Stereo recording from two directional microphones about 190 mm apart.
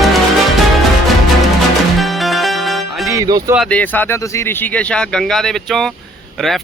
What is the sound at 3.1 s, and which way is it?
Music, 20° right (ahead or behind).